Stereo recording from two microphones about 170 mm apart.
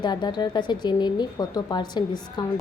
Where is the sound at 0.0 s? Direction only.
25° left (ahead or behind).